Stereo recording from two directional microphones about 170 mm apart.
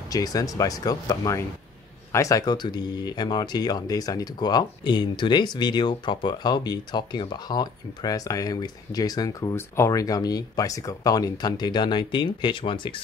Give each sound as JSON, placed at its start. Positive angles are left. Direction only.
{"t": 0.1, "sound": "speech", "side_deg": 20}